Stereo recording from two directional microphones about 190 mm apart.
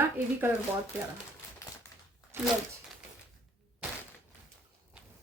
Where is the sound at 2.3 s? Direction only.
15° right (ahead or behind).